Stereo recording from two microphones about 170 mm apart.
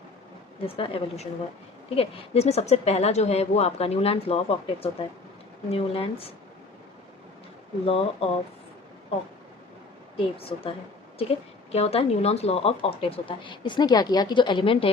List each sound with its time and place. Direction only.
0.6 s speech: 35° left (ahead or behind)
7.9 s speech: 35° left (ahead or behind)
10.2 s speech: 35° left (ahead or behind)
11.7 s speech: 35° left (ahead or behind)